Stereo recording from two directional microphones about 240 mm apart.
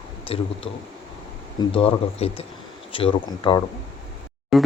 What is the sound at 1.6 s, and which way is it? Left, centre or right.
Speech, left.